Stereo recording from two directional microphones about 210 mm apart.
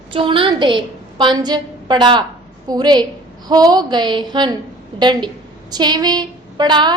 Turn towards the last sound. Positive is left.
turn(degrees=-20)  # may be behind; listen again after turning